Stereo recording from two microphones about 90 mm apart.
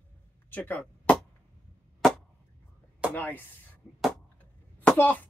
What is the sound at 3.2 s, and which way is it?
Speech, 20° left (ahead or behind).